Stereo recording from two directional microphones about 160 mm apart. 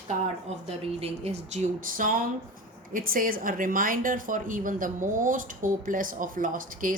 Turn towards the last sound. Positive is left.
turn(degrees=-55)  # may be behind; listen again after turning